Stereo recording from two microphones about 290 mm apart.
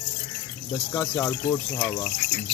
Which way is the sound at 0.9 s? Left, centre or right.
Centre.